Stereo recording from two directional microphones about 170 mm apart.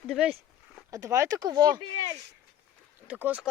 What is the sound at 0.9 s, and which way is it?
Speech, 20° right (ahead or behind).